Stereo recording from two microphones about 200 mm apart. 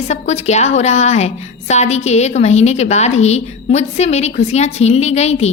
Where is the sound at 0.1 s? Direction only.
35° left (ahead or behind).